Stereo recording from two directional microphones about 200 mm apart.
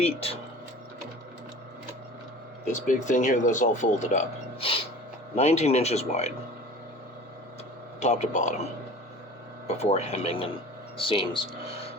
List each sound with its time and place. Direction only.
0.0 s speech: 30° left (ahead or behind)
2.7 s speech: 40° left (ahead or behind)
7.9 s speech: 35° left (ahead or behind)
9.6 s speech: 30° left (ahead or behind)